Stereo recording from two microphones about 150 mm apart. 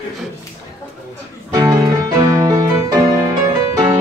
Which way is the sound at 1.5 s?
25° right (ahead or behind).